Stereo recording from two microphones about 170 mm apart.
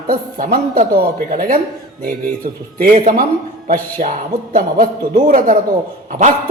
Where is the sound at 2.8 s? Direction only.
50° right (ahead or behind).